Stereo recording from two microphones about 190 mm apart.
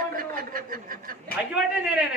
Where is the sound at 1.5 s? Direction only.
5° right (ahead or behind).